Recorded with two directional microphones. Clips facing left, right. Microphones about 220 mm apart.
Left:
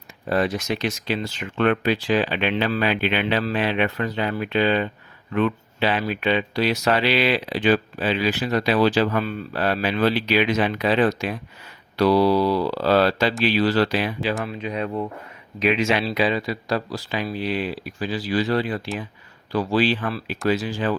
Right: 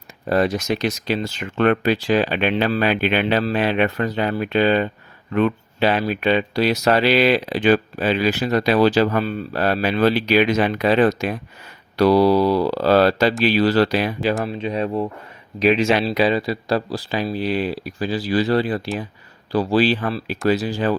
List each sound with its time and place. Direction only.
0.3 s speech: 40° right (ahead or behind)
14.4 s speech: 30° right (ahead or behind)